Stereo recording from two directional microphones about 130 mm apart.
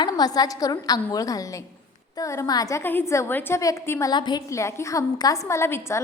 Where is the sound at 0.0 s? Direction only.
30° left (ahead or behind).